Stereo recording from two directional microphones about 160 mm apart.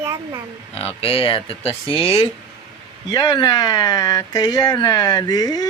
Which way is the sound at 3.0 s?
25° left (ahead or behind).